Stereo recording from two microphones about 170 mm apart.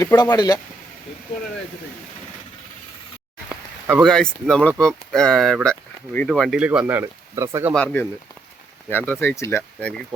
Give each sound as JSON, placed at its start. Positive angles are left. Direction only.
{"t": 0.0, "sound": "speech", "side_deg": 20}
{"t": 4.0, "sound": "speech", "side_deg": 5}
{"t": 7.7, "sound": "speech", "side_deg": 5}